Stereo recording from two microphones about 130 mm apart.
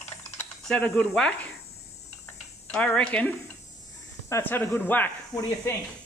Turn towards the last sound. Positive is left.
turn(degrees=30)  # may be behind; listen again after turning